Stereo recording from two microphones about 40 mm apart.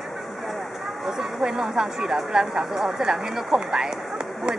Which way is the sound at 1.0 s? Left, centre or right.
Centre.